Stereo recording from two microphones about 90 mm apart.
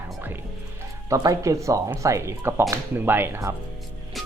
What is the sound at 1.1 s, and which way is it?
Speech, 40° right (ahead or behind).